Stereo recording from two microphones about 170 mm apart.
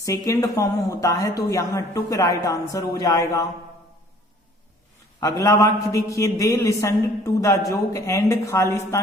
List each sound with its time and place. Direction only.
0.0 s a man's voice: 20° left (ahead or behind)
5.2 s a man's voice: 20° left (ahead or behind)